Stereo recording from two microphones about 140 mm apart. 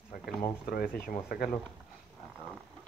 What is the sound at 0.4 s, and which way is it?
Speech, 90° left.